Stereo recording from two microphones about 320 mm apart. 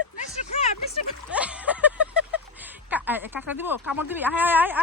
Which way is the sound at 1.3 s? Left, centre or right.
Centre.